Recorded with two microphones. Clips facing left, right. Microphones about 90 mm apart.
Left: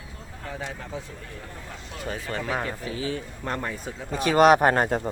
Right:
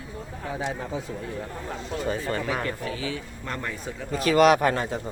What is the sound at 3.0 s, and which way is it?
Speech, 40° left (ahead or behind).